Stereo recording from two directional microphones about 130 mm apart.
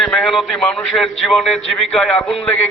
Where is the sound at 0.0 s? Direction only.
Centre (ahead or behind).